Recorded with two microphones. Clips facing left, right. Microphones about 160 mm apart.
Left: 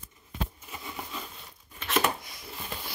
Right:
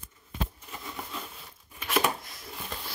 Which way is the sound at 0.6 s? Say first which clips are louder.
Even; 5° left (ahead or behind).